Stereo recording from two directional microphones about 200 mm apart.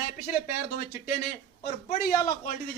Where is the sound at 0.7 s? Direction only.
40° left (ahead or behind).